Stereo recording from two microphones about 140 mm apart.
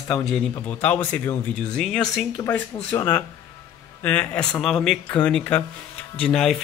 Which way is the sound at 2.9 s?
15° left (ahead or behind).